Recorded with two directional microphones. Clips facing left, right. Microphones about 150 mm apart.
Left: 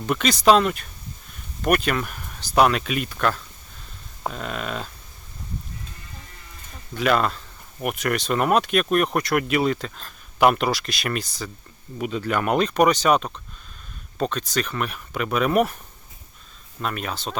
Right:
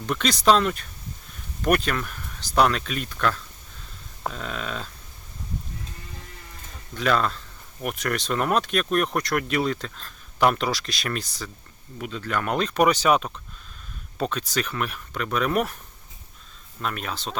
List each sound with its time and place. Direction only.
0.0 s speech: 5° left (ahead or behind)
6.9 s speech: 5° left (ahead or behind)
11.9 s speech: 15° left (ahead or behind)
16.8 s speech: centre (ahead or behind)